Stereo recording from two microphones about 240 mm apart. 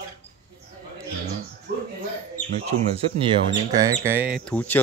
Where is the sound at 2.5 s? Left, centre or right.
Right; by 4.4 s centre.